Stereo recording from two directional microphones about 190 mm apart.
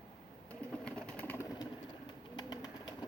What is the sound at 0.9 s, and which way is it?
Pigeon, 5° left (ahead or behind).